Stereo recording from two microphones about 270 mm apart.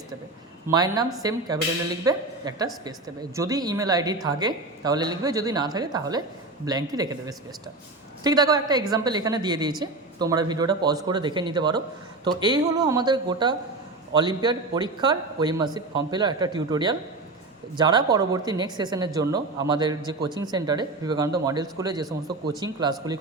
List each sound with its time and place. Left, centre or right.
0.7 s a woman's voice: centre